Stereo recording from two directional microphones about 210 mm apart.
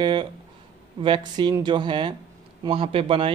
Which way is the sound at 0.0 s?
20° right (ahead or behind).